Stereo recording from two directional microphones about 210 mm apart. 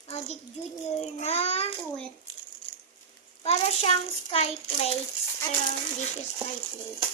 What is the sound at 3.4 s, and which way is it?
Child singing, 30° left (ahead or behind).